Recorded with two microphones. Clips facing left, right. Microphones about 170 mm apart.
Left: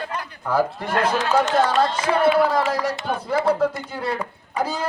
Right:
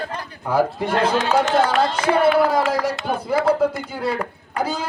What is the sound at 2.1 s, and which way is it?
A man's voice, 5° right (ahead or behind).